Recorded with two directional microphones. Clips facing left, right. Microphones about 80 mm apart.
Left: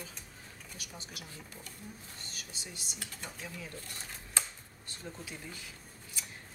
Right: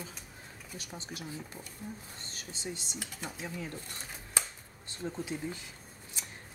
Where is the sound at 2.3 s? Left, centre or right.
Right.